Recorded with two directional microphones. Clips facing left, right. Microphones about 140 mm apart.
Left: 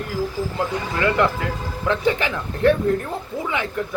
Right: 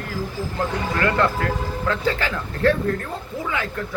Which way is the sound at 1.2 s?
15° left (ahead or behind).